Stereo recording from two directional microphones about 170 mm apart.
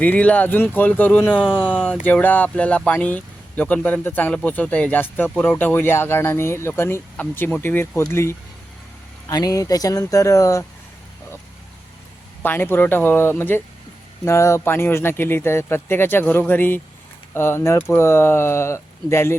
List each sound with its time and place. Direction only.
0.0 s speech: 10° left (ahead or behind)
1.3 s speech: 5° right (ahead or behind)
1.5 s speech: 10° left (ahead or behind)
12.4 s speech: 10° left (ahead or behind)